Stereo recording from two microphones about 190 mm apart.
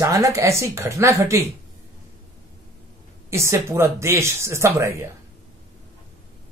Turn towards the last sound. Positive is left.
turn(degrees=-15)  # may be behind; listen again after turning